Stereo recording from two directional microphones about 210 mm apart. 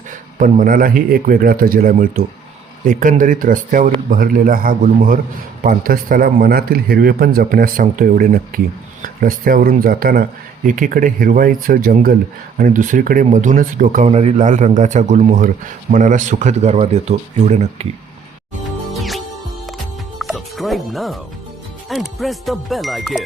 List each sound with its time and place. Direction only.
0.1 s speech: 35° right (ahead or behind)
18.9 s music: centre (ahead or behind)
21.8 s speech: centre (ahead or behind)